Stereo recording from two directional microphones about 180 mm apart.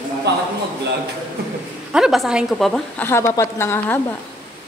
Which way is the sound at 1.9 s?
Centre (ahead or behind).